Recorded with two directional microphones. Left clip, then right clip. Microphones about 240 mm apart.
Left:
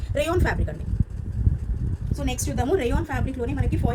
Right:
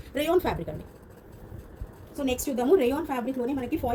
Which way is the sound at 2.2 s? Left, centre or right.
Left.